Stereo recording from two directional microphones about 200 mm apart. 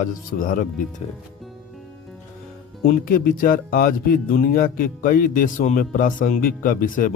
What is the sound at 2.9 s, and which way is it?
Speech, 45° left (ahead or behind).